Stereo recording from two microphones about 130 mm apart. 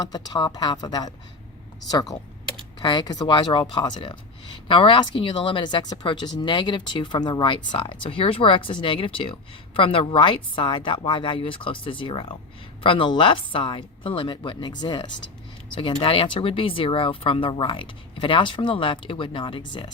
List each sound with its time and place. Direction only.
0.0 s speech: 30° left (ahead or behind)